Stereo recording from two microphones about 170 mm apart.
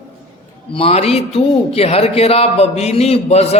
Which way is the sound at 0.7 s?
35° left (ahead or behind).